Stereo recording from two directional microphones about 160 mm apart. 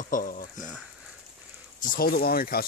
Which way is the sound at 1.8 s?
60° left (ahead or behind).